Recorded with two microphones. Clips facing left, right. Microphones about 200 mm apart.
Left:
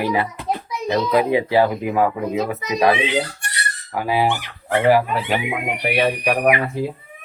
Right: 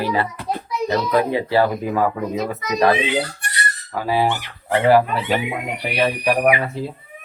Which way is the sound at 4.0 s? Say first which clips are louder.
Even; 15° left (ahead or behind).